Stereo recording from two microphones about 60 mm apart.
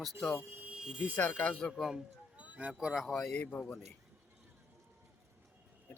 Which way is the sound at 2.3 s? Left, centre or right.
Centre.